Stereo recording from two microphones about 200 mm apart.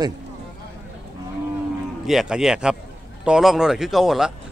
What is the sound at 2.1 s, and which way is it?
A man's voice, centre (ahead or behind).